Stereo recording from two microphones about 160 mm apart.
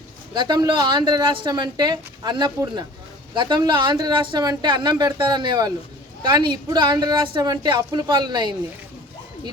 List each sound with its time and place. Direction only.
0.3 s a woman's voice: 25° right (ahead or behind)